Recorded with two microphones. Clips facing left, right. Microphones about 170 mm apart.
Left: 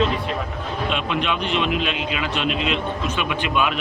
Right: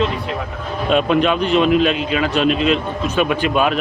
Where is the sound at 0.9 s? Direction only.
45° right (ahead or behind).